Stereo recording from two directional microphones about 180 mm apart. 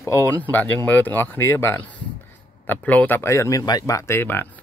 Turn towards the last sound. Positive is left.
turn(degrees=10)  # may be behind; listen again after turning